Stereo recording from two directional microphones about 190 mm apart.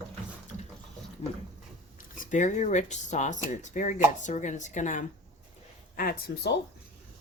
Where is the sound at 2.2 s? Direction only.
40° left (ahead or behind).